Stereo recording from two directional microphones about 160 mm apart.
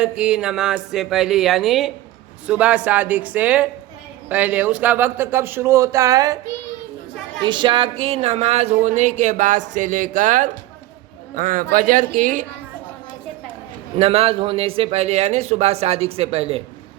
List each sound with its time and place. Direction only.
0.0 s a woman's voice: 5° right (ahead or behind); by 6.4 s 20° right (ahead or behind)
7.4 s a woman's voice: 30° right (ahead or behind); by 12.5 s 55° right (ahead or behind)
14.0 s a man's voice: 40° right (ahead or behind)